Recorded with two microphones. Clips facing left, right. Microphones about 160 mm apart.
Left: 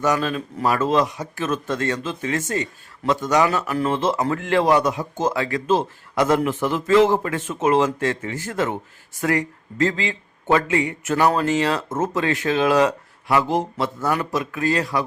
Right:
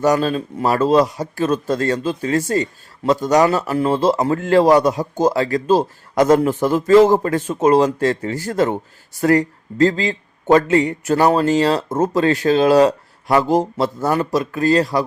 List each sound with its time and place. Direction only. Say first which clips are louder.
0.0 s a man's voice: right 5 dB; 35° right (ahead or behind)